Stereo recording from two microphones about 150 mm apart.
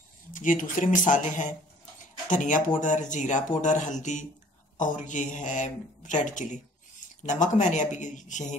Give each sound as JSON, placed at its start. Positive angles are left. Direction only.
{"t": 0.3, "sound": "speech", "side_deg": 60}